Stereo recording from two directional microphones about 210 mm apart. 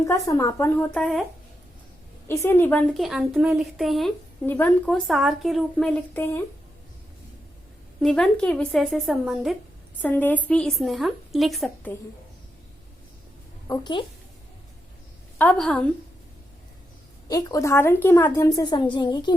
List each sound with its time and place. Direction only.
0.0 s speech: 15° left (ahead or behind)
2.2 s a woman's voice: 10° left (ahead or behind)
8.0 s a woman's voice: 5° left (ahead or behind)
13.7 s a woman's voice: 20° left (ahead or behind)
15.4 s a woman's voice: 5° left (ahead or behind)
17.2 s a woman's voice: 15° left (ahead or behind)